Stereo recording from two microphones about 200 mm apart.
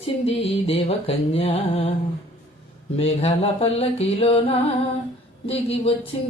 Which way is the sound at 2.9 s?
30° left (ahead or behind).